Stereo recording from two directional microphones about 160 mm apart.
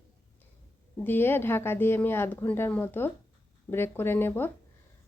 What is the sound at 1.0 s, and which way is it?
A woman's voice, 15° left (ahead or behind).